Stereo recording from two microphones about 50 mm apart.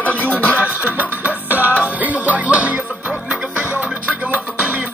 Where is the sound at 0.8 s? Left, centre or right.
Right.